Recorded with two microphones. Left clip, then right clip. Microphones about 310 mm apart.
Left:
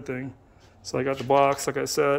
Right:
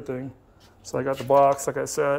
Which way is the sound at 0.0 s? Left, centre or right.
Centre.